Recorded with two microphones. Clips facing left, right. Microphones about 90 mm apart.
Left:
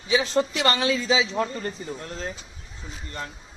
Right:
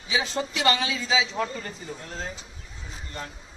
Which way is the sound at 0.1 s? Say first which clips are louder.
Left 5 dB; 55° left (ahead or behind).